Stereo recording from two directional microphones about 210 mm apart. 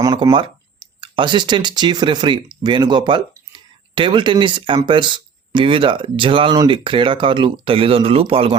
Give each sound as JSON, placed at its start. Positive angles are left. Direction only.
{"t": 0.0, "sound": "speech", "side_deg": -20}